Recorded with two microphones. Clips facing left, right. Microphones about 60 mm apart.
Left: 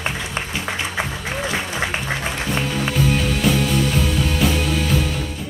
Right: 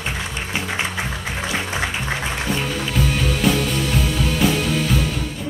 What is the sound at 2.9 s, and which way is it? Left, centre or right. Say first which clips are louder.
Music: left 1 dB; centre.